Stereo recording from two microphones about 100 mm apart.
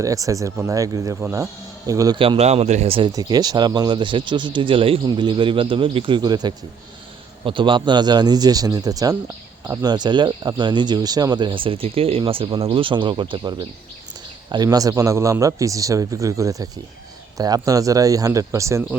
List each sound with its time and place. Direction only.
0.0 s a man's voice: 35° right (ahead or behind)
2.1 s a man's voice: 65° right (ahead or behind)
3.1 s speech: 40° right (ahead or behind)
7.4 s a man's voice: 55° right (ahead or behind); by 18.8 s 30° right (ahead or behind)